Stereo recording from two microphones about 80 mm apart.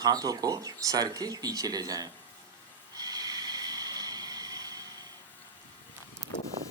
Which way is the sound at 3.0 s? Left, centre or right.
Right.